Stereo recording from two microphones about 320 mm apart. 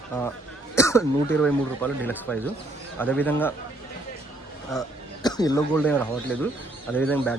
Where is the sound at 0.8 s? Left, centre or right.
Centre.